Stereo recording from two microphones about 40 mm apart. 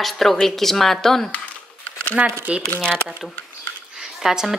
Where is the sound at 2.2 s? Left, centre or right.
Right.